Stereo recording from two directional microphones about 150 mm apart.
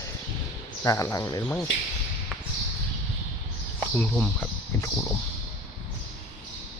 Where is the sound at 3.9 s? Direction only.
10° left (ahead or behind).